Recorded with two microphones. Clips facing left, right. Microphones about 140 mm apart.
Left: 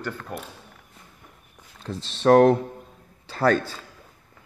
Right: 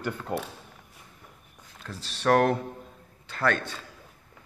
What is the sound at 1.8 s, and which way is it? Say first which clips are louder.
Speech: left 6 dB; 25° left (ahead or behind).